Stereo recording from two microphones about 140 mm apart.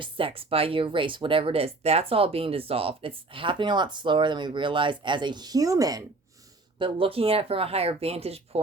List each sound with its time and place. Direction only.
0.0 s speech: 40° right (ahead or behind)
6.7 s speech: 40° right (ahead or behind)